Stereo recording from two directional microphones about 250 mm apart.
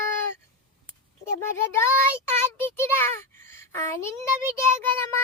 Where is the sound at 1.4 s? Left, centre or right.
Centre.